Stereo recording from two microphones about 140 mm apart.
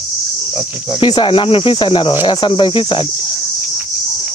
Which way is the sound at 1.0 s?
35° left (ahead or behind).